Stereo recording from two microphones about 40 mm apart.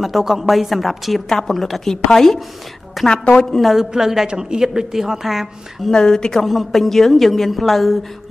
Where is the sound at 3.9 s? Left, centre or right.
Centre.